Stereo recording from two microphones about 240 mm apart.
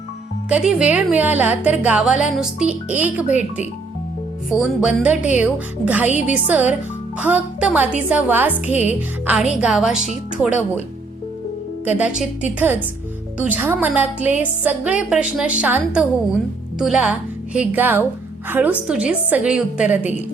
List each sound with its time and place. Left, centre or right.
0.4 s a woman's voice: centre
3.2 s speech: left
4.4 s a woman's voice: centre
11.9 s a woman's voice: centre